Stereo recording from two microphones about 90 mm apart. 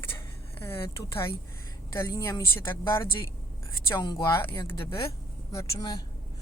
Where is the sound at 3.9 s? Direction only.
55° left (ahead or behind).